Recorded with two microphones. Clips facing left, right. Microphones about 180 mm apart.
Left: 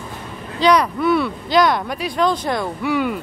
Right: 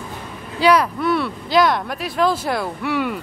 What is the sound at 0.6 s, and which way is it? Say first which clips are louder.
A woman's voice: left 1 dB; 5° right (ahead or behind).